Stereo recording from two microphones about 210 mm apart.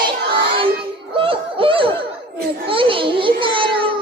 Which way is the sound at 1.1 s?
25° right (ahead or behind).